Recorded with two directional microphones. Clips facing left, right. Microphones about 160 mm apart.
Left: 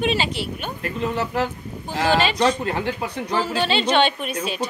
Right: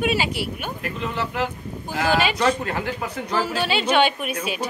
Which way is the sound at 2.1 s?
10° right (ahead or behind).